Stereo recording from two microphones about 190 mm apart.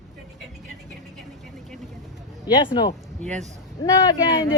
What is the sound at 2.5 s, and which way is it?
Speech, 10° right (ahead or behind).